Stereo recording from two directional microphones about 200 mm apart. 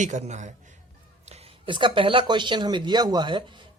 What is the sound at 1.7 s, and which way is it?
Speech, 25° right (ahead or behind).